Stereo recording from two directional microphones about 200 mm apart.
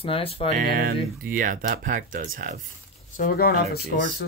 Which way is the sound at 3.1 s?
45° left (ahead or behind).